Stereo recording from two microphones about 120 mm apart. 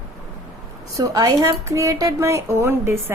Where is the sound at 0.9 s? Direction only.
30° right (ahead or behind).